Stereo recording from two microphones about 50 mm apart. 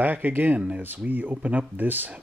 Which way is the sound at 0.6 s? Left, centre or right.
Right.